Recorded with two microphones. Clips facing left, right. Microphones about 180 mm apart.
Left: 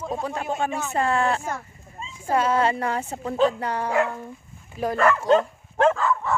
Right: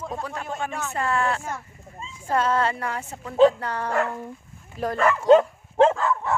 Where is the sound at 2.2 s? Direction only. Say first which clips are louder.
Left 1 dB; 5° left (ahead or behind).